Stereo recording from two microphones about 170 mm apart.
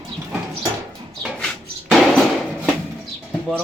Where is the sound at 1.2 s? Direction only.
Centre (ahead or behind).